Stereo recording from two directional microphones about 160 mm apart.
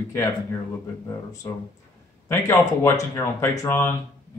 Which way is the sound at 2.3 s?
15° left (ahead or behind).